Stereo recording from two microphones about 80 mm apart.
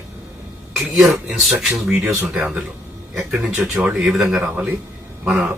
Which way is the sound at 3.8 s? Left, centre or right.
Centre.